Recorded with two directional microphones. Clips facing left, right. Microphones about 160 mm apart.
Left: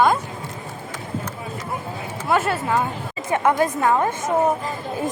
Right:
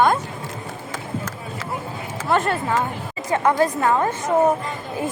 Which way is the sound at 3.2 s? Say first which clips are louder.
Right 1 dB; 20° left (ahead or behind).